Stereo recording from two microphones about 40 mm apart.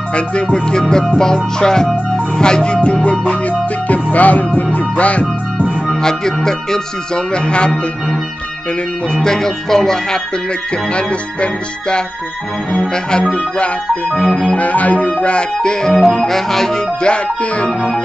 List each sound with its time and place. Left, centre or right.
0.1 s music: left
1.0 s speech: centre
2.1 s music: centre; by 5.2 s left
5.9 s speech: centre
7.3 s music: left
9.1 s speech: centre
10.9 s music: left
12.7 s speech: centre
14.5 s music: left
15.6 s music: centre
15.9 s speech: centre
17.0 s music: left